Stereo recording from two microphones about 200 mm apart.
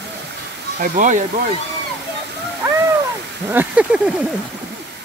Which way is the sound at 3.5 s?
10° right (ahead or behind).